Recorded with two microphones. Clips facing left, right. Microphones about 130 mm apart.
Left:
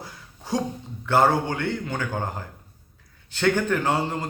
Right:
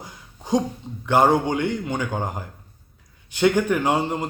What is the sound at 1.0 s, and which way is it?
A man's voice, 20° right (ahead or behind).